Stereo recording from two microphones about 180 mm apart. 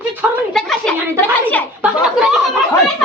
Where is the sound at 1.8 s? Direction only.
5° right (ahead or behind).